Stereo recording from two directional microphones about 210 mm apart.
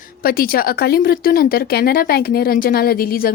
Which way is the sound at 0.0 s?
45° left (ahead or behind).